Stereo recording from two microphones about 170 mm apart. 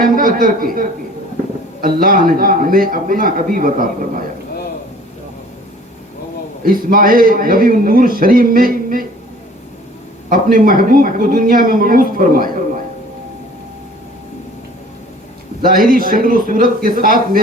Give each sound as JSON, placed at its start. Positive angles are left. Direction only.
{"t": 0.0, "sound": "a man's voice", "side_deg": -55}
{"t": 6.7, "sound": "a man's voice", "side_deg": -55}
{"t": 10.2, "sound": "a man's voice", "side_deg": -55}
{"t": 15.6, "sound": "a man's voice", "side_deg": -55}